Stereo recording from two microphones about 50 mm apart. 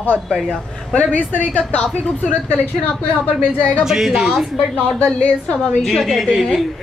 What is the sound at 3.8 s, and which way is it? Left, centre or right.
Speech, centre.